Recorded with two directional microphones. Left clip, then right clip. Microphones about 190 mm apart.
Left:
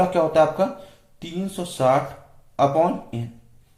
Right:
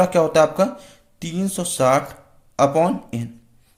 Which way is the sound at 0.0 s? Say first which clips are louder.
Right 2 dB; 45° right (ahead or behind).